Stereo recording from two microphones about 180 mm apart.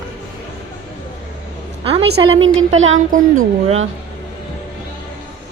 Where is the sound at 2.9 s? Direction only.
45° right (ahead or behind).